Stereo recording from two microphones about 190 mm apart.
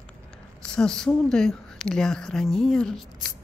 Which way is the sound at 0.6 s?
5° left (ahead or behind).